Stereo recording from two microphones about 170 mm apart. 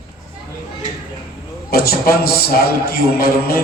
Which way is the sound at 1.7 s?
65° left (ahead or behind).